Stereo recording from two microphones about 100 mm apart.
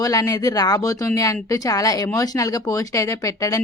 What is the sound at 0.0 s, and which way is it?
A woman's voice, 35° left (ahead or behind).